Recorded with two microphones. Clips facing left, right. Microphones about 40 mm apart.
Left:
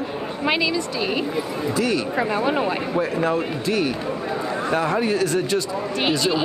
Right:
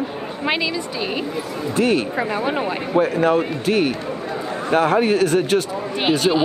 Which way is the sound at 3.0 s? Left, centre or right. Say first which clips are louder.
Right 6 dB; right.